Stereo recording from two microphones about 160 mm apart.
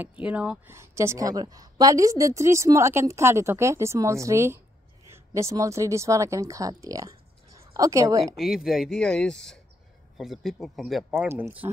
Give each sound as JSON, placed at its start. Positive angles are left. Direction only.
{"t": 0.0, "sound": "speech", "side_deg": -10}
{"t": 8.4, "sound": "speech", "side_deg": 0}
{"t": 11.1, "sound": "speech", "side_deg": -15}